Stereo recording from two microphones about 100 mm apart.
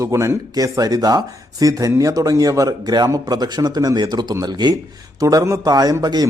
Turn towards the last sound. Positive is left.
turn(degrees=-40)  # may be behind; listen again after turning